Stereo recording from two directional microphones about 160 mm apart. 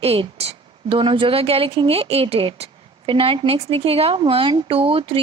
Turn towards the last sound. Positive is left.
turn(degrees=-35)  # may be behind; listen again after turning